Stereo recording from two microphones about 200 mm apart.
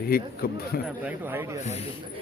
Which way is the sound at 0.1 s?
50° left (ahead or behind).